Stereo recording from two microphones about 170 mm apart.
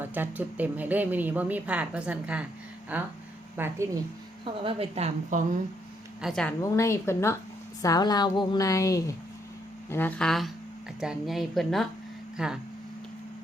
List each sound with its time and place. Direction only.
0.0 s speech: 10° right (ahead or behind)
4.4 s a woman's voice: 30° right (ahead or behind)
6.2 s speech: 5° left (ahead or behind)
6.6 s a woman's voice: 15° left (ahead or behind); by 12.5 s 5° right (ahead or behind)